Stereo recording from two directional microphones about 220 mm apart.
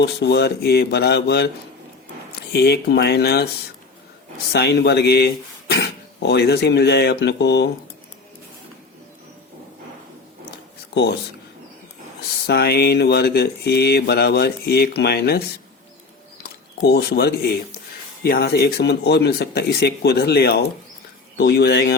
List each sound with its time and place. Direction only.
0.0 s speech: 50° left (ahead or behind)
2.5 s speech: 45° left (ahead or behind)
4.5 s speech: 50° left (ahead or behind)
12.5 s speech: 45° left (ahead or behind)